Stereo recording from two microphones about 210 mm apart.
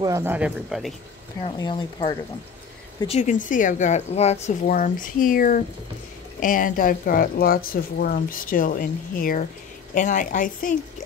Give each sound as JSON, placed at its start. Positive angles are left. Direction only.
{"t": 0.0, "sound": "speech", "side_deg": -15}
{"t": 1.6, "sound": "speech", "side_deg": 20}
{"t": 3.1, "sound": "speech", "side_deg": 35}